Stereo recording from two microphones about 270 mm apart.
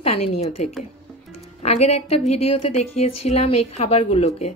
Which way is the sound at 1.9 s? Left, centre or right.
Left.